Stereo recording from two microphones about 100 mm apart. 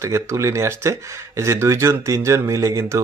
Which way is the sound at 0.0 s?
30° right (ahead or behind).